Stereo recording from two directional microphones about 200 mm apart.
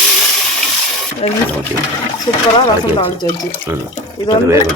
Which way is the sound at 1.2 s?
30° left (ahead or behind).